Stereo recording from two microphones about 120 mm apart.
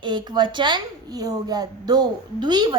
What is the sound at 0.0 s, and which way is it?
A woman's voice, 40° right (ahead or behind).